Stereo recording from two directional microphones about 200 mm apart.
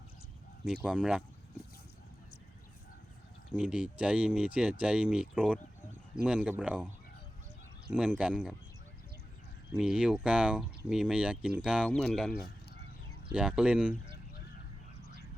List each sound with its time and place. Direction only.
0.6 s speech: 5° right (ahead or behind)
3.5 s speech: 5° right (ahead or behind)
7.9 s speech: 5° right (ahead or behind)
9.7 s speech: 5° right (ahead or behind)